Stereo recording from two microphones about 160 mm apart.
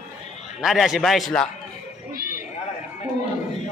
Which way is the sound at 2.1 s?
65° right (ahead or behind).